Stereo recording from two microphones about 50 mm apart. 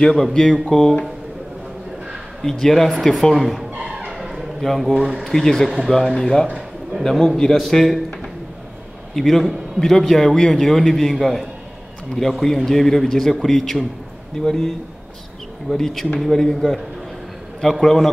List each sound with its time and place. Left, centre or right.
0.1 s a man's voice: centre
2.4 s a man's voice: centre
3.7 s a sound: centre
4.6 s a man's voice: centre
4.9 s speech: centre
5.2 s a man's voice: centre
6.4 s a sound: right
7.0 s a man's voice: centre
15.7 s a man's voice: centre